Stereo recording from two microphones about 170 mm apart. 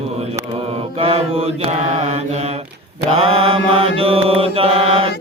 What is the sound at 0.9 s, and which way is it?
Mantra, 35° right (ahead or behind).